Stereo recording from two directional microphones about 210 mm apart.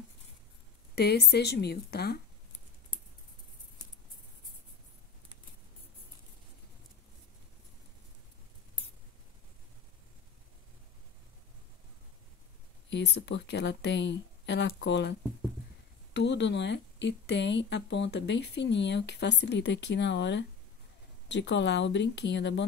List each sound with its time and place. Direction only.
0.9 s a woman's voice: 50° left (ahead or behind)
12.9 s speech: 55° left (ahead or behind)